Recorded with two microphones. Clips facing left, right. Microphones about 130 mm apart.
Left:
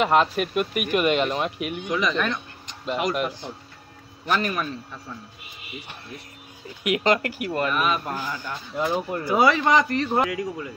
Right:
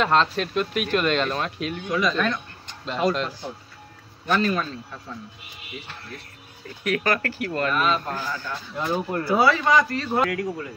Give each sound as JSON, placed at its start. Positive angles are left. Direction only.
{"t": 0.0, "sound": "a man's voice", "side_deg": 15}
{"t": 6.8, "sound": "a man's voice", "side_deg": 20}